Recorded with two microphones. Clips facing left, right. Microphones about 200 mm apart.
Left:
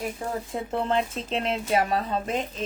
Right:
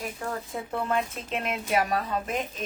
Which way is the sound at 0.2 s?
25° left (ahead or behind).